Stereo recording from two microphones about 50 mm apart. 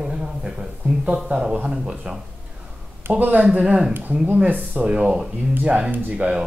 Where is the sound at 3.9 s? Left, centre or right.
Right.